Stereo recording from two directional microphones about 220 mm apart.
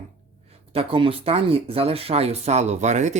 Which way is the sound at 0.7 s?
25° right (ahead or behind).